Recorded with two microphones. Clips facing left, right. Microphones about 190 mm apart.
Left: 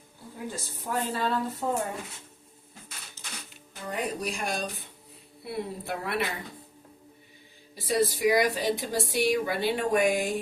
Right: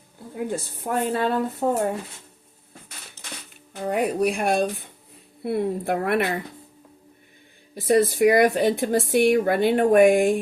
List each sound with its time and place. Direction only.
0.3 s speech: 60° right (ahead or behind)
3.8 s speech: 60° right (ahead or behind)
7.8 s speech: 55° right (ahead or behind)